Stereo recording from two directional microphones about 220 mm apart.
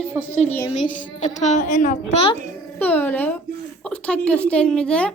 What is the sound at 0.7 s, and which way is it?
A woman's voice, 35° left (ahead or behind).